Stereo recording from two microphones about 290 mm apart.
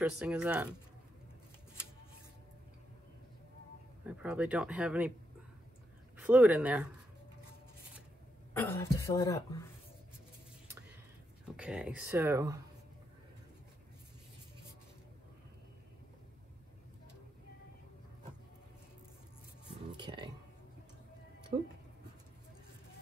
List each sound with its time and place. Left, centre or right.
0.0 s speech: centre
4.0 s speech: centre
6.1 s speech: centre
8.5 s speech: centre
11.4 s speech: centre
20.0 s a sound: centre